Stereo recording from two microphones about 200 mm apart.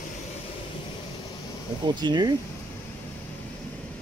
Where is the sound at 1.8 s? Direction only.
20° right (ahead or behind).